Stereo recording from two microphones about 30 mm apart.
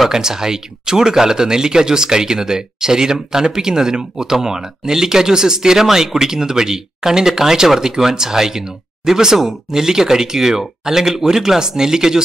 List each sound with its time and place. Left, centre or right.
0.1 s speech: centre